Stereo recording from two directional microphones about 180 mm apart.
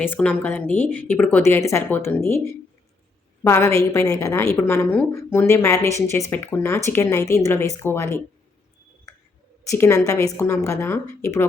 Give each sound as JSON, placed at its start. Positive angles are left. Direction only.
{"t": 0.0, "sound": "a woman's voice", "side_deg": 10}
{"t": 9.6, "sound": "a woman's voice", "side_deg": 15}